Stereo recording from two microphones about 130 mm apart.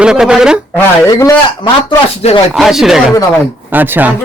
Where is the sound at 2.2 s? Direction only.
55° left (ahead or behind).